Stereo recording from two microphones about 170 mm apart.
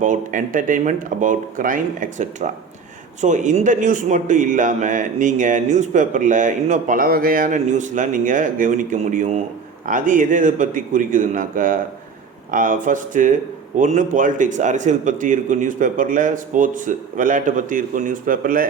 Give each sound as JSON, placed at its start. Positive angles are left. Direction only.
{"t": 0.0, "sound": "speech", "side_deg": -50}